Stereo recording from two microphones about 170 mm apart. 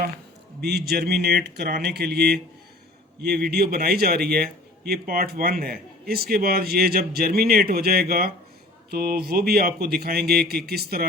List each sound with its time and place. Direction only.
0.6 s a man's voice: 70° right (ahead or behind)